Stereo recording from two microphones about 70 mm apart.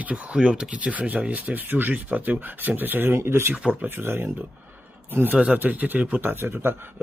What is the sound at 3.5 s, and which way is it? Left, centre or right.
A man's voice, centre.